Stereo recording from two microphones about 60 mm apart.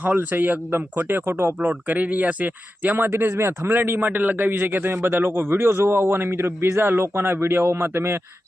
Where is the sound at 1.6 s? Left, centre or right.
Right.